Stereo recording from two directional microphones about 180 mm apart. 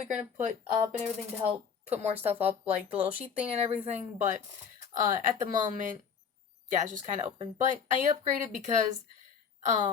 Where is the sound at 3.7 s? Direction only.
40° right (ahead or behind).